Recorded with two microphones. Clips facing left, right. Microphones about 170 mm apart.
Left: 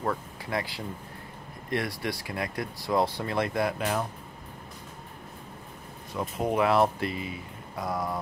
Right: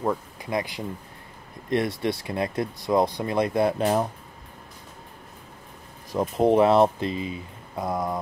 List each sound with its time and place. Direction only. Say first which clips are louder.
0.0 s speech: right 4 dB; 20° right (ahead or behind); by 4.1 s 35° right (ahead or behind)
6.1 s speech: right 8 dB; 30° right (ahead or behind)